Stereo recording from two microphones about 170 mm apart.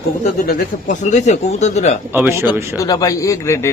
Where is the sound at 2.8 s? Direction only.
20° left (ahead or behind).